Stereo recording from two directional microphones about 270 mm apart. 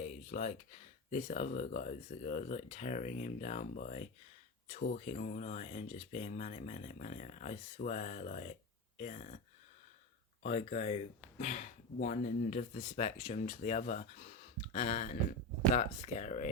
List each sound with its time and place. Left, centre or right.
0.3 s speech: left
10.4 s speech: left
11.9 s speech: left